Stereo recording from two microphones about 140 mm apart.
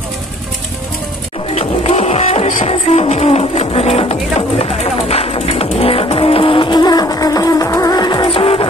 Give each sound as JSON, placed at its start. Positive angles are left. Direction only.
{"t": 1.5, "sound": "music", "side_deg": 50}